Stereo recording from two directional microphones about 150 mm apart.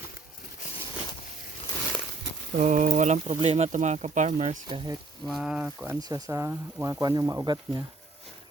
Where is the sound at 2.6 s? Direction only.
55° right (ahead or behind).